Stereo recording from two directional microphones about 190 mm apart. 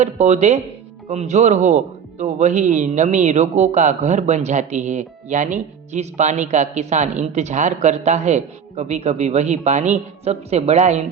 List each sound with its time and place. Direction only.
0.0 s a man's voice: 35° right (ahead or behind)